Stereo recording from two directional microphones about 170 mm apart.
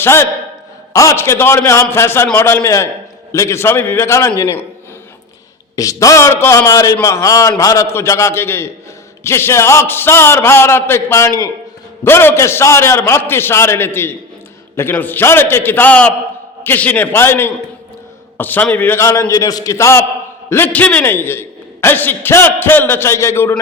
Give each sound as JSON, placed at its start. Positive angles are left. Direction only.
{"t": 0.0, "sound": "a man's voice", "side_deg": 15}
{"t": 5.7, "sound": "a man's voice", "side_deg": 20}